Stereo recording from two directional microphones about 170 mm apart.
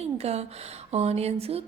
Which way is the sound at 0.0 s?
40° right (ahead or behind).